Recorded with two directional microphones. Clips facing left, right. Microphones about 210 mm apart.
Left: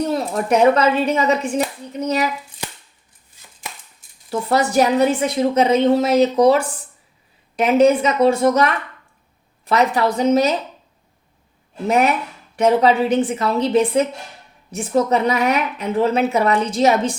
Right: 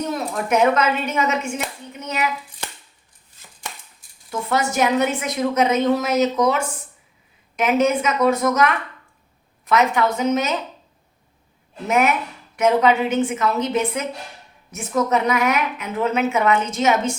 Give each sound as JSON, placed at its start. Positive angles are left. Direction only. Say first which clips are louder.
{"t": 0.0, "sound": "a woman's voice", "louder": "left 4 dB", "side_deg": 35}
{"t": 4.3, "sound": "a woman's voice", "louder": "left 4 dB", "side_deg": 35}
{"t": 11.9, "sound": "a woman's voice", "louder": "left 2 dB", "side_deg": 35}